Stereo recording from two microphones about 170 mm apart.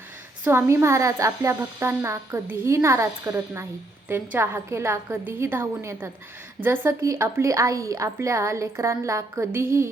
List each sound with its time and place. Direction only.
0.4 s speech: 15° right (ahead or behind)